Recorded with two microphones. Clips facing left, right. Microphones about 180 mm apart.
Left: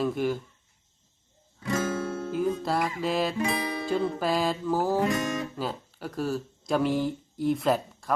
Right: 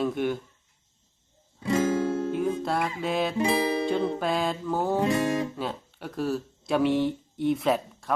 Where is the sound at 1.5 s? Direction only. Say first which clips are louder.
Right 4 dB; 30° right (ahead or behind).